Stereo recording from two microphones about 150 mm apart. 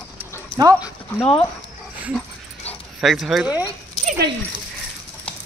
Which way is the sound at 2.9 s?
Centre (ahead or behind).